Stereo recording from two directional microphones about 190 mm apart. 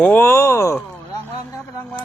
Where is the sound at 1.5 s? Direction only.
15° left (ahead or behind).